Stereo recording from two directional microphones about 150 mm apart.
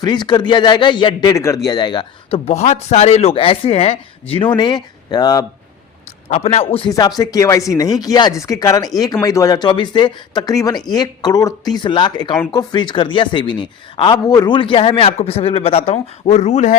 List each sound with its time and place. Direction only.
0.0 s speech: 30° left (ahead or behind)
2.5 s speech: 45° left (ahead or behind); by 5.5 s 25° left (ahead or behind)
6.2 s speech: 45° left (ahead or behind)
6.9 s speech: 25° left (ahead or behind); by 16.7 s 50° left (ahead or behind)